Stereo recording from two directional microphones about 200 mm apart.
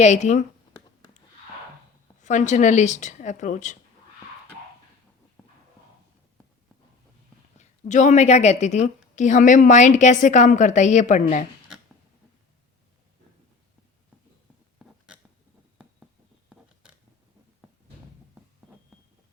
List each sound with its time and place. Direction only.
0.0 s a woman's voice: 35° left (ahead or behind)
2.2 s a woman's voice: 35° left (ahead or behind)
7.6 s a woman's voice: 35° left (ahead or behind)
14.8 s burping: centre (ahead or behind)